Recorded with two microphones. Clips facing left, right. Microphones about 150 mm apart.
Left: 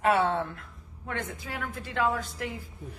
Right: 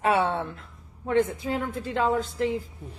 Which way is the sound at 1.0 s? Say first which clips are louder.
Right 12 dB; 30° right (ahead or behind).